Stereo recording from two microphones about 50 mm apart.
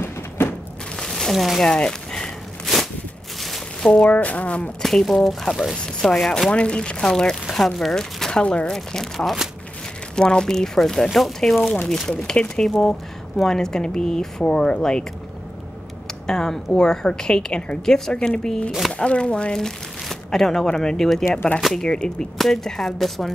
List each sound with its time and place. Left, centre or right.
0.9 s a sound: centre
1.6 s speech: centre
2.6 s walk: centre
3.4 s a sound: centre
4.1 s speech: left
4.8 s speech: centre
6.5 s speech: left
8.4 s speech: left
8.7 s speech: centre
10.1 s speech: centre
11.9 s speech: centre
16.3 s speech: centre